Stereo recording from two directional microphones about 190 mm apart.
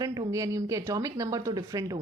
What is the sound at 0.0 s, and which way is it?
Speech, 20° right (ahead or behind).